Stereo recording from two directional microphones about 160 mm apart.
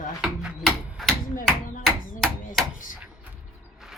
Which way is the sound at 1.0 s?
Centre (ahead or behind).